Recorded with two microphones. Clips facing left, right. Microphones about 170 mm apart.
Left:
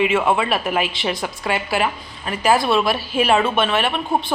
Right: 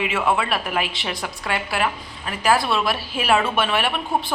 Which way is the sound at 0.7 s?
Centre (ahead or behind).